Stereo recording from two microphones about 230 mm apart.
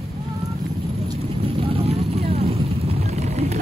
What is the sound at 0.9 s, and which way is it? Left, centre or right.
Vehicle, right.